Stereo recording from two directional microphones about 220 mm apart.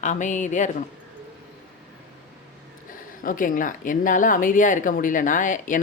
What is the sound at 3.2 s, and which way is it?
Speech, 35° left (ahead or behind).